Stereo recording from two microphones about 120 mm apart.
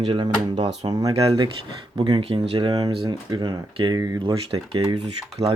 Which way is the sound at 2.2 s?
50° right (ahead or behind).